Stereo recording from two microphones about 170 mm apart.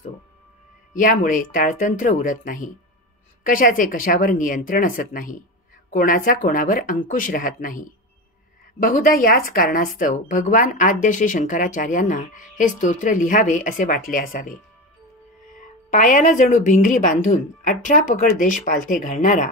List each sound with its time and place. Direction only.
0.9 s speech: 50° left (ahead or behind)
15.5 s speech: 50° left (ahead or behind)